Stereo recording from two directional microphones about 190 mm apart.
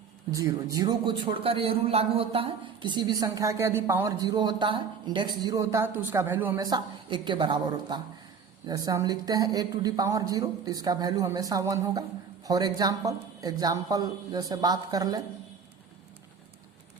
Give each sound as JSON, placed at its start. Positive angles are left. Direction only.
{"t": 0.3, "sound": "a man's voice", "side_deg": -20}